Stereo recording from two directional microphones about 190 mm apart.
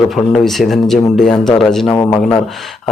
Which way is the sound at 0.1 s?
Centre (ahead or behind).